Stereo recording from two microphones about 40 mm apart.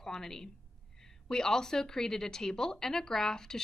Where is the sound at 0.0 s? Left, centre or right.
Centre.